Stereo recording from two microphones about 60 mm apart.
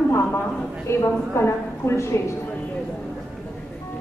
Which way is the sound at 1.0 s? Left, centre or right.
Left.